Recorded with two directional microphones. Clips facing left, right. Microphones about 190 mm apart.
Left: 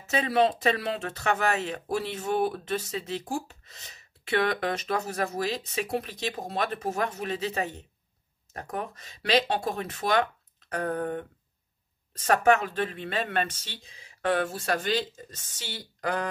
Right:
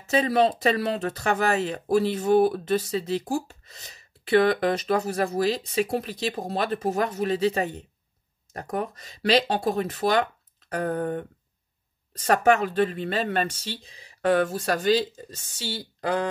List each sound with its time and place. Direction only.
0.0 s speech: 35° right (ahead or behind)
12.3 s speech: 35° right (ahead or behind)